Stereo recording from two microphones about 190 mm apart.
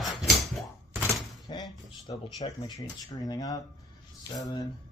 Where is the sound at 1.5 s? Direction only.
25° left (ahead or behind).